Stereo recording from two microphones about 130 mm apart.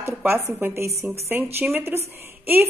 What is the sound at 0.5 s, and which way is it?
A woman's voice, 20° right (ahead or behind).